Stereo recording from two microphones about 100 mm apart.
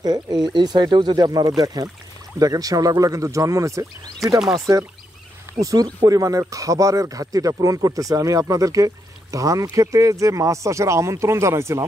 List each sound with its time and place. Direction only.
0.0 s speech: 45° right (ahead or behind)
4.4 s speech: 5° right (ahead or behind)
5.5 s speech: 35° right (ahead or behind)